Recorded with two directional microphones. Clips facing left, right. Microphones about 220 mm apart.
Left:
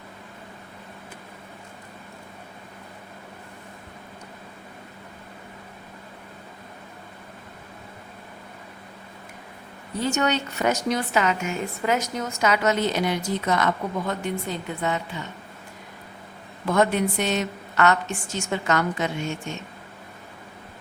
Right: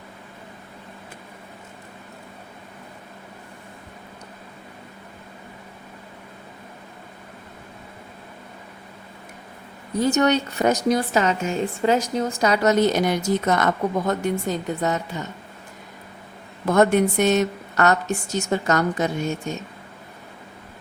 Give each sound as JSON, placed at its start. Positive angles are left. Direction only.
{"t": 10.1, "sound": "a woman's voice", "side_deg": -40}
{"t": 16.6, "sound": "a woman's voice", "side_deg": -45}